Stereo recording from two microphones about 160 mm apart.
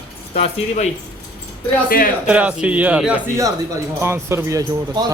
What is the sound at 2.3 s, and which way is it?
A man's voice, 10° right (ahead or behind).